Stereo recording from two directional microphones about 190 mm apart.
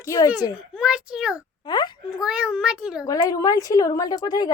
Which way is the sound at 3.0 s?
20° left (ahead or behind).